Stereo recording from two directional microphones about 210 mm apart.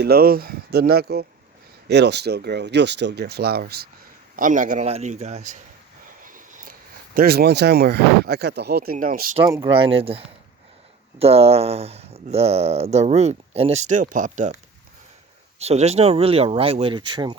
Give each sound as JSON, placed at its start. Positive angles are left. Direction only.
{"t": 0.0, "sound": "a man's voice", "side_deg": -45}
{"t": 9.0, "sound": "a man's voice", "side_deg": -40}
{"t": 9.5, "sound": "speech", "side_deg": -20}